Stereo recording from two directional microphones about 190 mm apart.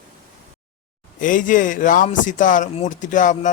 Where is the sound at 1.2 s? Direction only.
45° left (ahead or behind).